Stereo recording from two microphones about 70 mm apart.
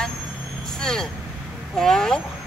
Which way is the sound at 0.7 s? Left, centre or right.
Centre.